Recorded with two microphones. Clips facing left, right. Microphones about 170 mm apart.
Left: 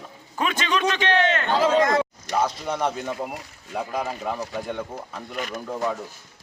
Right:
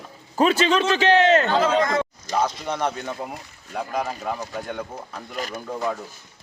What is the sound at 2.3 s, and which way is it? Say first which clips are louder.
A man's voice: right 1 dB; centre (ahead or behind).